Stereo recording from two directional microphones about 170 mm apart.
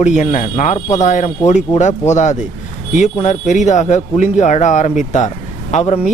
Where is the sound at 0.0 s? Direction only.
40° left (ahead or behind).